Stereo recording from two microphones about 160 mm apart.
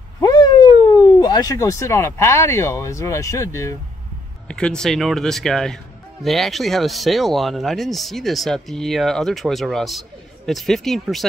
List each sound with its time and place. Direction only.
0.2 s speech: 25° left (ahead or behind)
4.5 s speech: 5° left (ahead or behind)